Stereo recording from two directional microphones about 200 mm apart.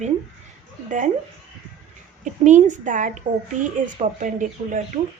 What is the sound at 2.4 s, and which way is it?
Speech, 40° right (ahead or behind).